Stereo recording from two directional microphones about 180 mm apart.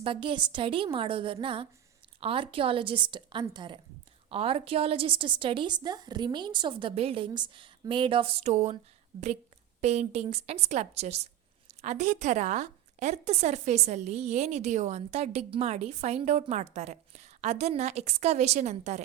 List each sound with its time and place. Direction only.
0.0 s a woman's voice: 30° right (ahead or behind)